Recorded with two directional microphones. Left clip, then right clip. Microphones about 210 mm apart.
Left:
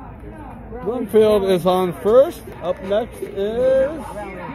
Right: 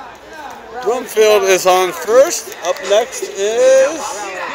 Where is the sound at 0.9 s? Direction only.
5° right (ahead or behind).